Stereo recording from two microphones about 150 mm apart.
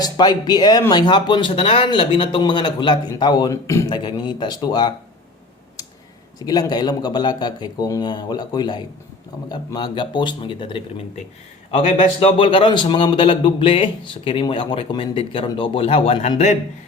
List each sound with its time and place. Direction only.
0.0 s speech: 30° left (ahead or behind)
3.8 s speech: 30° left (ahead or behind)
6.4 s speech: 25° left (ahead or behind)
11.9 s speech: 35° left (ahead or behind)